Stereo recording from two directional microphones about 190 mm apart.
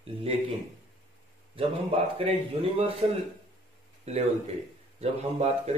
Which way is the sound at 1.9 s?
30° right (ahead or behind).